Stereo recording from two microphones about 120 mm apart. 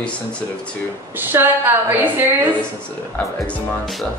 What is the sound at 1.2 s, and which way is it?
A woman's voice, 15° right (ahead or behind).